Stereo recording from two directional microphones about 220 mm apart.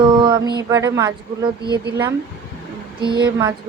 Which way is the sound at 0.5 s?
15° right (ahead or behind).